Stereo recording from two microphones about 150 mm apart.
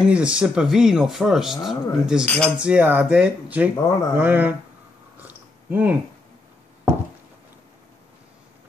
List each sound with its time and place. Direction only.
0.0 s speech: 5° right (ahead or behind)
2.2 s speech: 10° left (ahead or behind)
2.6 s speech: 10° right (ahead or behind)
3.7 s speech: 20° left (ahead or behind)
4.2 s speech: 10° right (ahead or behind)
5.2 s chewing: 10° right (ahead or behind)